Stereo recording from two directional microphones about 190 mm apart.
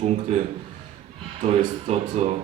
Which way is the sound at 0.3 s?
35° right (ahead or behind).